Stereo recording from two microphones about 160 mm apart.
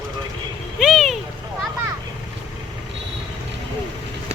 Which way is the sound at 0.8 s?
Centre (ahead or behind).